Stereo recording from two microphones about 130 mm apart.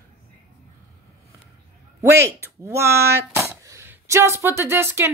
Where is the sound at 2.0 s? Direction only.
20° right (ahead or behind).